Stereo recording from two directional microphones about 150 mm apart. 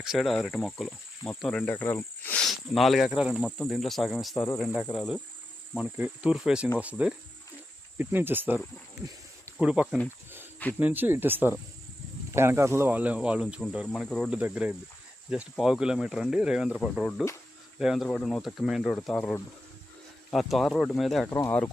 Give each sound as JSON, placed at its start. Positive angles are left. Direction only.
{"t": 0.0, "sound": "speech", "side_deg": 0}
{"t": 6.0, "sound": "speech", "side_deg": -5}
{"t": 9.6, "sound": "speech", "side_deg": -10}
{"t": 13.8, "sound": "speech", "side_deg": 5}
{"t": 14.3, "sound": "speech", "side_deg": -10}
{"t": 21.2, "sound": "speech", "side_deg": 25}